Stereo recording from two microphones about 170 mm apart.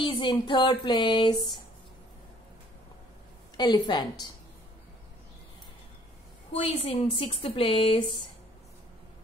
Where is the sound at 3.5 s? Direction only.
25° left (ahead or behind).